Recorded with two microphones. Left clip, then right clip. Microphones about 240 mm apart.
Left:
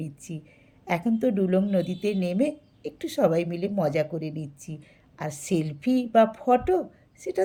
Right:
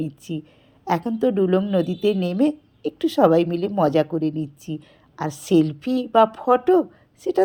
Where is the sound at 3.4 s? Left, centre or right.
Right.